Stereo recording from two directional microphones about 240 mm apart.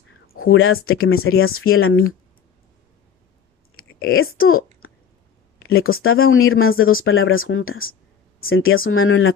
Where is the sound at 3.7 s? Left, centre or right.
Left.